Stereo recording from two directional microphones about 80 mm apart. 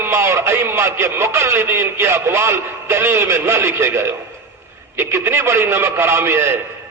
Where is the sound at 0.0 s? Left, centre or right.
Right.